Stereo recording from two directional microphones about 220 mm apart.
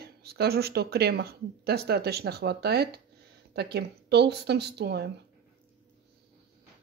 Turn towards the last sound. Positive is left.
turn(degrees=-50)  # may be behind; listen again after turning